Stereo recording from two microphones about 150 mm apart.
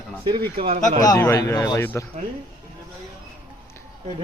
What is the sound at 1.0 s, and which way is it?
Speech, 20° left (ahead or behind).